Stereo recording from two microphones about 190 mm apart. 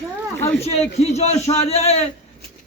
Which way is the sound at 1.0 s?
35° left (ahead or behind).